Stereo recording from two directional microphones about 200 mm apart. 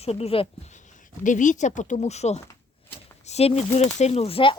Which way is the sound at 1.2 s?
40° left (ahead or behind).